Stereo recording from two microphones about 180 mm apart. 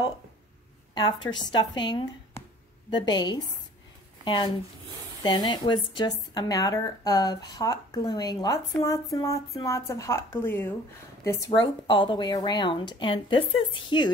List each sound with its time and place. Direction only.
0.9 s speech: 25° left (ahead or behind)